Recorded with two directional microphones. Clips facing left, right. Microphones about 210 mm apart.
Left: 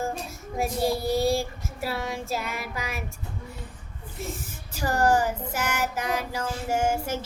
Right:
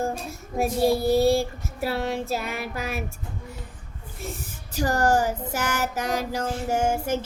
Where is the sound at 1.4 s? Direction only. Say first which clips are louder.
Right 4 dB; 55° right (ahead or behind).